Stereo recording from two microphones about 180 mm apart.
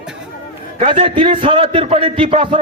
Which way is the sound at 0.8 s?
30° right (ahead or behind).